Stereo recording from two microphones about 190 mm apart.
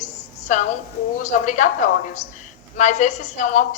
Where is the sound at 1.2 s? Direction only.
40° left (ahead or behind).